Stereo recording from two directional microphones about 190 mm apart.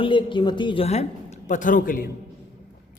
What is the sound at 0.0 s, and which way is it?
Speech, 25° left (ahead or behind).